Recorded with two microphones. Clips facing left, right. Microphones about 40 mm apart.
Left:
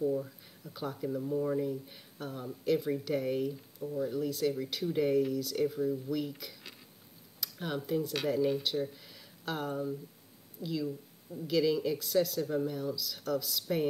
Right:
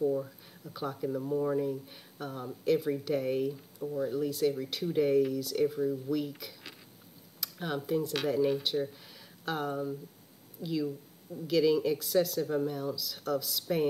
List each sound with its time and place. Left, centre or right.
0.2 s speech: centre